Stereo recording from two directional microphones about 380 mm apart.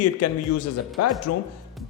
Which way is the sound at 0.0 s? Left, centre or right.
Left.